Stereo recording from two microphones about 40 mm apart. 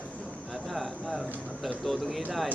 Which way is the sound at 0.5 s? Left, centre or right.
Centre.